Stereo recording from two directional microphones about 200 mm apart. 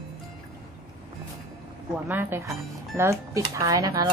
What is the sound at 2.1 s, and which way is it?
Speech, 10° right (ahead or behind).